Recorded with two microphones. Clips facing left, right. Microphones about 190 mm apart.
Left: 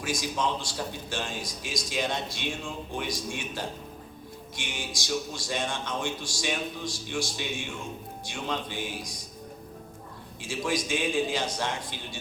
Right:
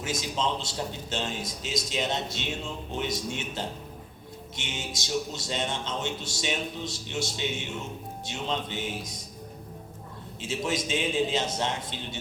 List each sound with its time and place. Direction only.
0.0 s a man's voice: 20° right (ahead or behind)
10.4 s a man's voice: 25° right (ahead or behind)